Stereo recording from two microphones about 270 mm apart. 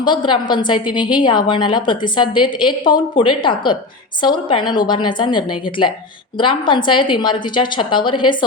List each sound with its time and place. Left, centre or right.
0.0 s a woman's voice: centre